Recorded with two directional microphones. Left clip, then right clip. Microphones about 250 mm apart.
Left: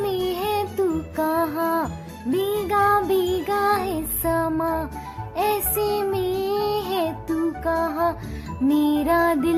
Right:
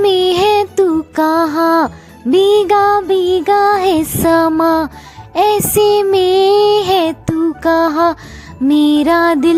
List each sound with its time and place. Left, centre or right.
0.0 s music: right